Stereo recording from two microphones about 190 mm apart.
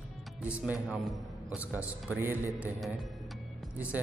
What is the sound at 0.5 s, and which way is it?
A man's voice, 5° right (ahead or behind).